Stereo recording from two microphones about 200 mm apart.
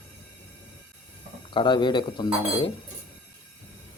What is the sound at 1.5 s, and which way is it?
Speech, 25° left (ahead or behind).